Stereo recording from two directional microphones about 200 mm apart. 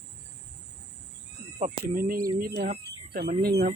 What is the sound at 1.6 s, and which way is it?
Speech, 45° right (ahead or behind).